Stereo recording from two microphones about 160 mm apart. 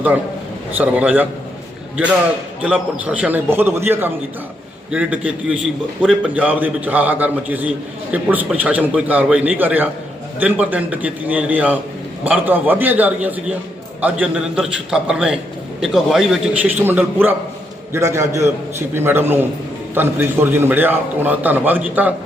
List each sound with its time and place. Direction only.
0.8 s a man's voice: 10° right (ahead or behind)
2.6 s a man's voice: 5° right (ahead or behind)